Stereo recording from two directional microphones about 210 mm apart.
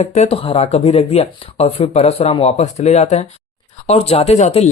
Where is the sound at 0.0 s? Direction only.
30° left (ahead or behind).